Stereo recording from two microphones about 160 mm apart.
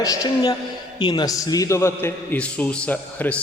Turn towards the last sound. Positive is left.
turn(degrees=10)  # may be behind; listen again after turning